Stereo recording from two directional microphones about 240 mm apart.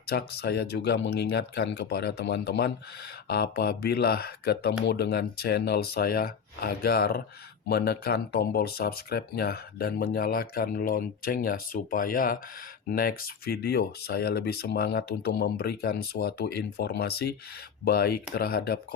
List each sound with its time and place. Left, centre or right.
0.1 s speech: left